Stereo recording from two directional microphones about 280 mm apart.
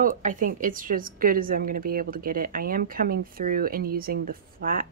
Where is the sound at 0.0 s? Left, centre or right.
Right.